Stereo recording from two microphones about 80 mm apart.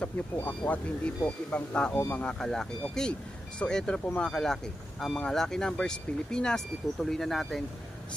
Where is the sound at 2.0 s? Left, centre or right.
Left.